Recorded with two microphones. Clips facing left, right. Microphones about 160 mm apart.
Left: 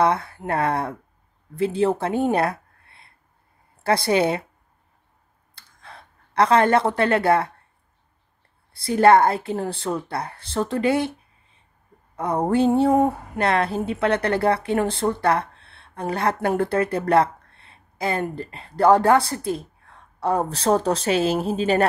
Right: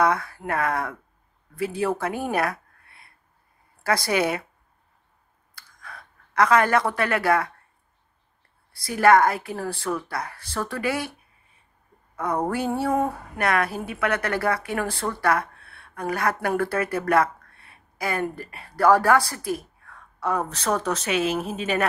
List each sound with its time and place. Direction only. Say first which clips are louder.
0.0 s speech: left 2 dB; 30° left (ahead or behind)
5.5 s a sound: even; 25° left (ahead or behind)
8.7 s speech: left 3 dB; 30° left (ahead or behind)
12.2 s speech: left 5 dB; 25° left (ahead or behind)